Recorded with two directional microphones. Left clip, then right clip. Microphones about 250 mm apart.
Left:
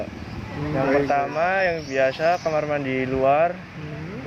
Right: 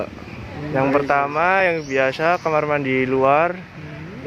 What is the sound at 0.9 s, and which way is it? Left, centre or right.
Speech, right.